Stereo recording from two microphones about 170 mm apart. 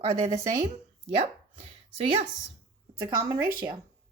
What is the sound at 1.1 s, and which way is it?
Speech, 40° right (ahead or behind).